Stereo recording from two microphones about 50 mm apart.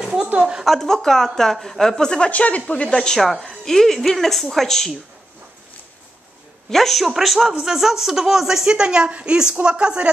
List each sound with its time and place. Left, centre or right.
0.0 s a sound: centre
0.7 s a woman's voice: centre; by 2.6 s left
2.9 s a woman's voice: centre
3.2 s speech: centre
6.7 s speech: centre; by 10.1 s right